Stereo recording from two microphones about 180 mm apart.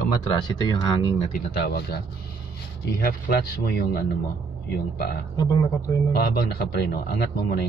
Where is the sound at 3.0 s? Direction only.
60° left (ahead or behind).